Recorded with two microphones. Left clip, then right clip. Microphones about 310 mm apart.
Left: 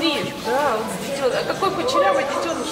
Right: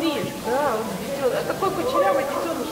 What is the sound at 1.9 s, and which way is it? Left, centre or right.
Chatter, centre.